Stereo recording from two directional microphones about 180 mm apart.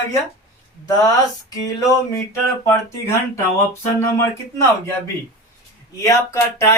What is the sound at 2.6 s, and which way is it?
Speech, 15° left (ahead or behind).